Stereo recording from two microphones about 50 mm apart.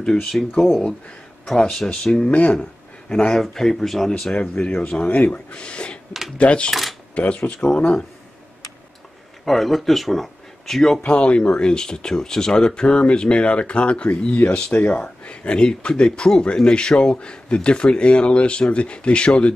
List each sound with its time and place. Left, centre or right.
0.0 s speech: centre
4.2 s speech: centre
5.1 s speech: left
5.5 s speech: left
6.7 s speech: centre
7.2 s speech: left
9.4 s speech: centre
11.1 s speech: left